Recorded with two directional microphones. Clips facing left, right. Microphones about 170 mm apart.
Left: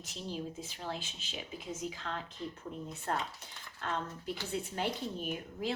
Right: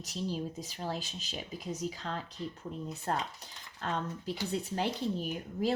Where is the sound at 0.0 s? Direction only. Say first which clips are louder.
Right 4 dB; 40° right (ahead or behind).